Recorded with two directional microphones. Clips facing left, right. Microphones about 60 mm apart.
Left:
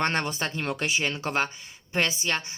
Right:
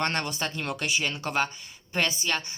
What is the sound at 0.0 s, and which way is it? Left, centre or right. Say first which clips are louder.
A woman's voice: left 2 dB; left.